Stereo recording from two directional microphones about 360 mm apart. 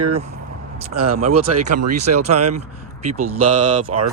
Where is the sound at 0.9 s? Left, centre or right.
Right.